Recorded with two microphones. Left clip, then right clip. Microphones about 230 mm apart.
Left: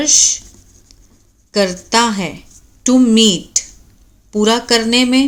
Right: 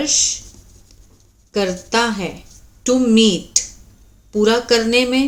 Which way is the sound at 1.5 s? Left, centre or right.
Left.